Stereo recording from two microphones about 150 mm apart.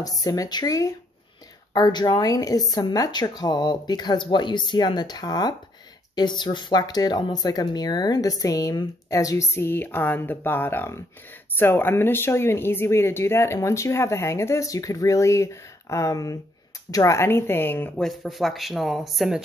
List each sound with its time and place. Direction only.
0.2 s speech: 25° left (ahead or behind)
18.0 s speech: centre (ahead or behind)